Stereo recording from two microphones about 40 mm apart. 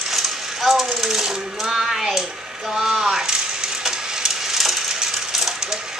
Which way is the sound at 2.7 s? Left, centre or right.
Centre.